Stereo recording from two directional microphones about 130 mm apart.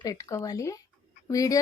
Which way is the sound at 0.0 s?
25° left (ahead or behind).